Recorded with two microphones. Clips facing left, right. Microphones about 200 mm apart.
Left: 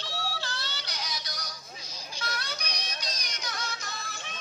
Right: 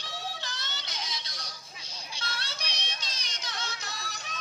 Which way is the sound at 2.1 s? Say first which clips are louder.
Left 4 dB; 30° right (ahead or behind).